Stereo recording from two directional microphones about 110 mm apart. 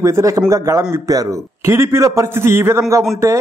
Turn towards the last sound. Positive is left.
turn(degrees=-25)  # may be behind; listen again after turning